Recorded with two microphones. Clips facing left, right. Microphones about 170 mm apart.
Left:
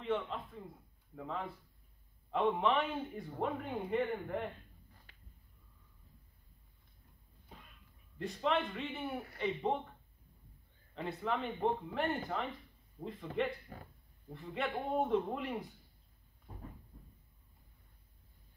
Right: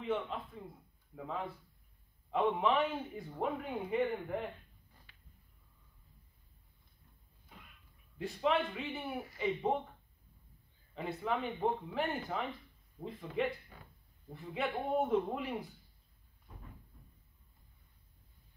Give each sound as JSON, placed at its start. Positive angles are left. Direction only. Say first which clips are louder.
{"t": 0.0, "sound": "a man's voice", "louder": "even", "side_deg": -5}
{"t": 8.2, "sound": "a man's voice", "louder": "right 2 dB", "side_deg": -5}
{"t": 11.0, "sound": "a man's voice", "louder": "right 1 dB", "side_deg": -5}
{"t": 13.3, "sound": "speech", "louder": "right 1 dB", "side_deg": 40}
{"t": 14.3, "sound": "a man's voice", "louder": "right 1 dB", "side_deg": 0}